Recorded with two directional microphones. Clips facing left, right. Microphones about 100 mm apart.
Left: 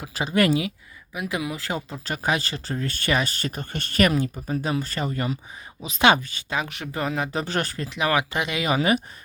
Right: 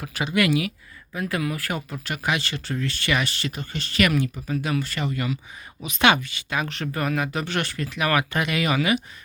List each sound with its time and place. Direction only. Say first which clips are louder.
0.1 s speech: left 1 dB; 35° left (ahead or behind)
1.1 s speech: right 2 dB; 15° left (ahead or behind); by 4.1 s 50° left (ahead or behind)
4.4 s speech: even; 35° left (ahead or behind)
6.7 s speech: right 2 dB; 15° left (ahead or behind)
7.3 s speech: left 1 dB; 35° left (ahead or behind)